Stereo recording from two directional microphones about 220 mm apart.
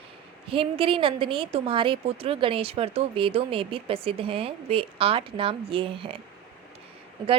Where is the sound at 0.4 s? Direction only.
25° right (ahead or behind).